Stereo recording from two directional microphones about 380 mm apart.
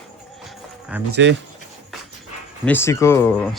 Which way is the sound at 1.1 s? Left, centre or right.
Right.